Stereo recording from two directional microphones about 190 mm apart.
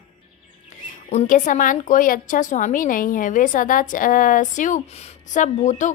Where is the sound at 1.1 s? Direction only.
40° left (ahead or behind).